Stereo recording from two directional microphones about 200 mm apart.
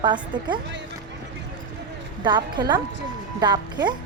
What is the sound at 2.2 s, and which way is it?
Speech, 20° right (ahead or behind).